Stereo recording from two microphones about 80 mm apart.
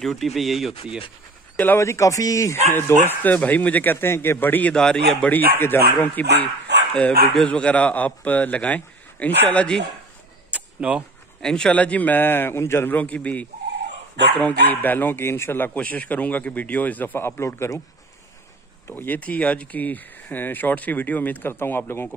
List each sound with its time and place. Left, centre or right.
0.0 s speech: centre
1.8 s speech: left
2.7 s speech: left
4.7 s a man's voice: centre
5.3 s a man's voice: left
10.5 s a sound: centre
11.4 s speech: centre; by 17.8 s left
18.9 s speech: left